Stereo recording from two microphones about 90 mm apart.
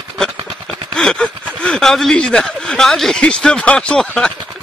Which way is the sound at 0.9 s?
10° left (ahead or behind).